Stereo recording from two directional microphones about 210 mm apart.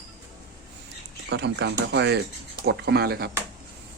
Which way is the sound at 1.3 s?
55° right (ahead or behind).